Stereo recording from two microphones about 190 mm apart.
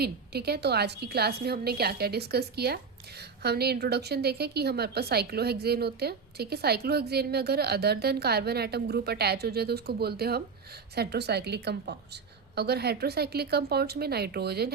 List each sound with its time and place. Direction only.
0.0 s a woman's voice: 55° right (ahead or behind)